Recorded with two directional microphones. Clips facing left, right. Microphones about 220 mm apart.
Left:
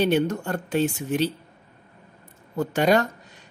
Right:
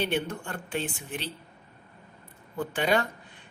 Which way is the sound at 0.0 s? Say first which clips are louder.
Left 8 dB; 40° left (ahead or behind).